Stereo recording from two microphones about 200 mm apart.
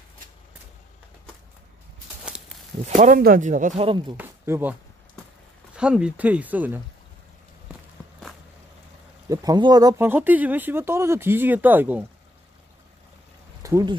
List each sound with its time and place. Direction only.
3.0 s speech: 45° right (ahead or behind); by 4.2 s 25° right (ahead or behind)
4.2 s speech: 10° right (ahead or behind)
5.8 s speech: 5° right (ahead or behind)
7.7 s walk: 5° right (ahead or behind)
9.3 s speech: 20° right (ahead or behind)
13.6 s a sound: 15° right (ahead or behind)